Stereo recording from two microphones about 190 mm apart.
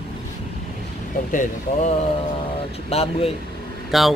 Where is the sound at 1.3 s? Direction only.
40° left (ahead or behind).